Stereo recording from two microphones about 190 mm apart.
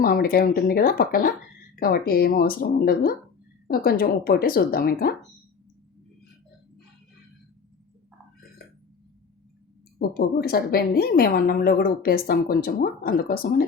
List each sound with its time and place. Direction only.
0.0 s a woman's voice: 50° left (ahead or behind)
10.2 s a woman's voice: 55° left (ahead or behind)